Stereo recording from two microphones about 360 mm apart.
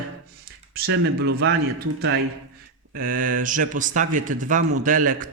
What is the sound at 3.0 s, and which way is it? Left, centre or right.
A man's voice, right.